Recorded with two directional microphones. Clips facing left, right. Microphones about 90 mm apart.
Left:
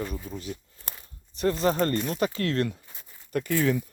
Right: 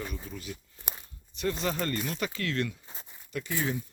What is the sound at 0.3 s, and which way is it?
Speech, 35° left (ahead or behind).